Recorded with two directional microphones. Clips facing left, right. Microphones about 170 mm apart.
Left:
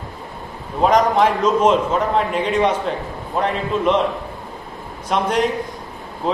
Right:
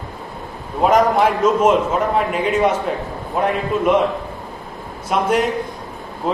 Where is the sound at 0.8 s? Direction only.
5° right (ahead or behind).